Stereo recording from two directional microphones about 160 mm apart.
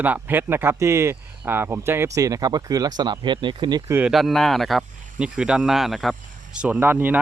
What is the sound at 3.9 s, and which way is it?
Speech, 5° right (ahead or behind).